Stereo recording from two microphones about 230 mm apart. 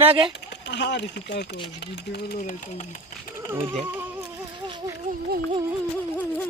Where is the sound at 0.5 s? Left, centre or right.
Left.